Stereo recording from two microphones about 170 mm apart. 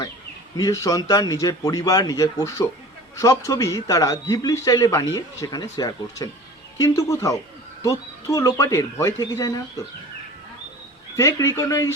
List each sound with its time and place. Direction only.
0.5 s speech: 20° left (ahead or behind)
11.2 s speech: 15° left (ahead or behind)